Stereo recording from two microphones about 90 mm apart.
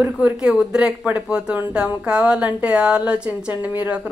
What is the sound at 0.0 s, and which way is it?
A woman's voice, 15° right (ahead or behind).